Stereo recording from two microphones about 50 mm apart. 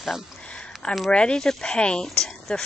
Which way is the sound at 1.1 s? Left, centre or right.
Centre.